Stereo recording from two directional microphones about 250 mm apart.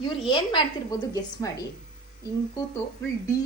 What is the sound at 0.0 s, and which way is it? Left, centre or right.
A woman's voice, centre.